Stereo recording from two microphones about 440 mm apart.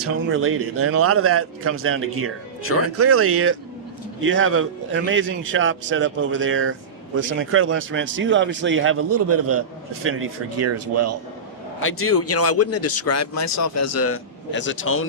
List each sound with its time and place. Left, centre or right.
0.0 s a man's voice: right
2.6 s speech: left
3.0 s a man's voice: right
11.8 s speech: left